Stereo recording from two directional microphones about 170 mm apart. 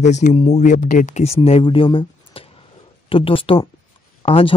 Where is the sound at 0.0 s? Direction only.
45° left (ahead or behind).